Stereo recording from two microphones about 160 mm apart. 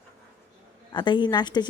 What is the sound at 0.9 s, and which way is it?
Speech, 30° left (ahead or behind).